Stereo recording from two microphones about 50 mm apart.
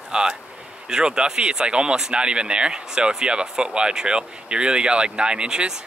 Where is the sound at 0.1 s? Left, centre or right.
Centre.